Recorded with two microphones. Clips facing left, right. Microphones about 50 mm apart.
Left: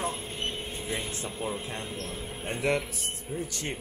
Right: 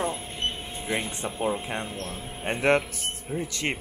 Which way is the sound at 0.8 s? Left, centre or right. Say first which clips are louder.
Right 7 dB; right.